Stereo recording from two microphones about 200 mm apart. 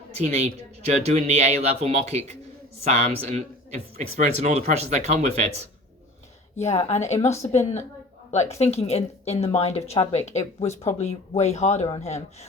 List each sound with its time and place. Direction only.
0.1 s a man's voice: 30° right (ahead or behind)
6.6 s a woman's voice: 35° left (ahead or behind)